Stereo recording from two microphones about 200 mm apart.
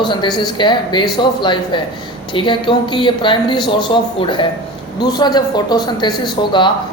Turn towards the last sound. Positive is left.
turn(degrees=25)  # may be behind; listen again after turning